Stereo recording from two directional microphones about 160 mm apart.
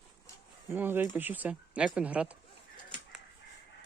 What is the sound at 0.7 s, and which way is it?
Speech, 15° right (ahead or behind).